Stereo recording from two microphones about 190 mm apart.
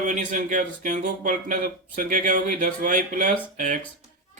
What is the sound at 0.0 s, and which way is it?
Speech, 40° right (ahead or behind).